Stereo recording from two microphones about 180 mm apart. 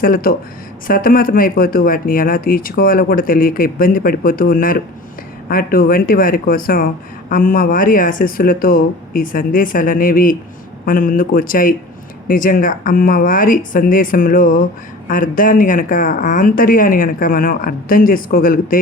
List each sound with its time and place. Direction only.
0.0 s speech: 55° left (ahead or behind)